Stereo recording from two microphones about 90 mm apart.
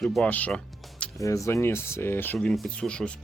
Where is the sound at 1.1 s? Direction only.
35° left (ahead or behind).